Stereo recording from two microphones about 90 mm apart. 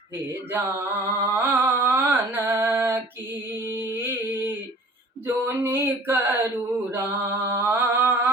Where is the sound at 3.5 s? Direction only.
25° right (ahead or behind).